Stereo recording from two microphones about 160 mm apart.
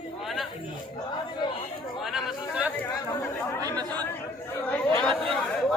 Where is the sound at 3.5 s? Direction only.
25° right (ahead or behind).